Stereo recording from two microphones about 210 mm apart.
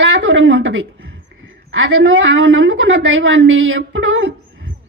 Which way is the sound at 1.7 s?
65° right (ahead or behind).